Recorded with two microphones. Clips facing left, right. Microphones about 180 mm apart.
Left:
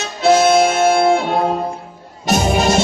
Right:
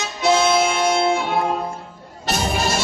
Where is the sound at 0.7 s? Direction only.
55° left (ahead or behind).